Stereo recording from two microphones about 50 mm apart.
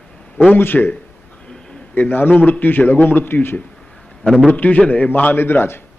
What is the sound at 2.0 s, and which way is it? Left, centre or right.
Speech, left.